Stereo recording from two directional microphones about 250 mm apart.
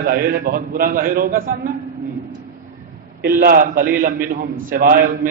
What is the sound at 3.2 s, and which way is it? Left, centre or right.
A man's voice, right.